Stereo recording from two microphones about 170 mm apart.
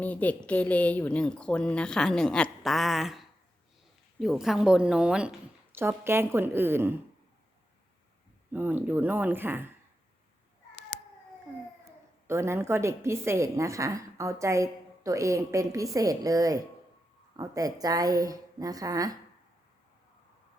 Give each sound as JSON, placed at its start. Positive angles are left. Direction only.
{"t": 0.0, "sound": "a woman's voice", "side_deg": 10}
{"t": 8.5, "sound": "a woman's voice", "side_deg": -10}
{"t": 12.3, "sound": "a woman's voice", "side_deg": -15}